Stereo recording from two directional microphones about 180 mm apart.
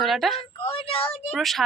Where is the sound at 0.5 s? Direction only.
30° left (ahead or behind).